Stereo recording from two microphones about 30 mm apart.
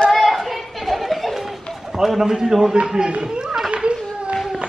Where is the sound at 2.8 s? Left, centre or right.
Right.